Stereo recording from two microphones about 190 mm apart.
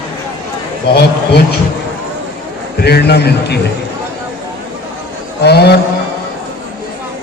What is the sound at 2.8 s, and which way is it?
Speech, 60° left (ahead or behind).